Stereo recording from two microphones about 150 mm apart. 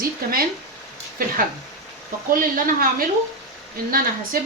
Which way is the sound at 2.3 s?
70° right (ahead or behind).